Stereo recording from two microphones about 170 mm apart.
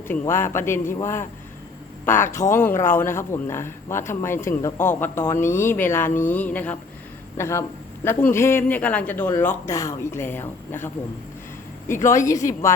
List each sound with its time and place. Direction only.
0.1 s speech: 15° left (ahead or behind)
2.5 s speech: 15° left (ahead or behind)